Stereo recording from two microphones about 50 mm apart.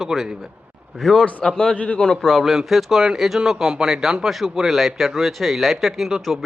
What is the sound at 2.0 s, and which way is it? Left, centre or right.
A man's voice, centre.